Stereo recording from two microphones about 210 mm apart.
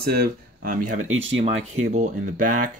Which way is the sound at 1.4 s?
35° right (ahead or behind).